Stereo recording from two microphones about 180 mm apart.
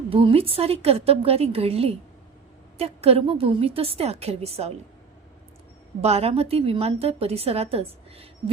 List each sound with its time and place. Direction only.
0.1 s a woman's voice: 30° right (ahead or behind)
6.0 s a woman's voice: 35° right (ahead or behind)